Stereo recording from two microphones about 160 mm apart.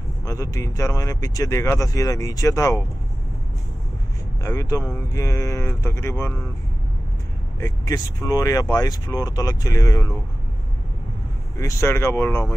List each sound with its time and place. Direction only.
0.2 s speech: 20° left (ahead or behind)
4.4 s speech: 20° left (ahead or behind)
7.6 s speech: 20° left (ahead or behind)
11.5 s speech: 20° left (ahead or behind)